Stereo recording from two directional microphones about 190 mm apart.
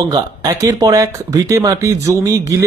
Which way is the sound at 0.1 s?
15° right (ahead or behind).